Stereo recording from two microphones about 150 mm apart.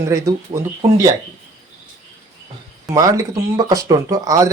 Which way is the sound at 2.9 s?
20° right (ahead or behind).